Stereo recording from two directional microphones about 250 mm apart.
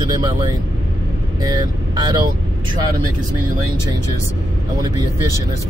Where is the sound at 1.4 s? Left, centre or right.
Centre.